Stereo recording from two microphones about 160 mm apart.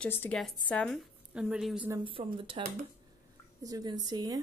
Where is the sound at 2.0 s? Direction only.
35° right (ahead or behind).